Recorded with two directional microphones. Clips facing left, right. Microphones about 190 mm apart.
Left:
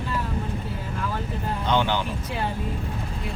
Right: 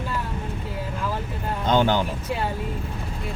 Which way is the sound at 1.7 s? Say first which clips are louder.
Right 4 dB; 45° right (ahead or behind).